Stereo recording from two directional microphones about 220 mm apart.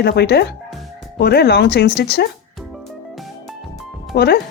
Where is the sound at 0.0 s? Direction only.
50° left (ahead or behind).